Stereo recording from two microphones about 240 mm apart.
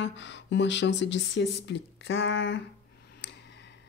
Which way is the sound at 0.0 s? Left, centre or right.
Left.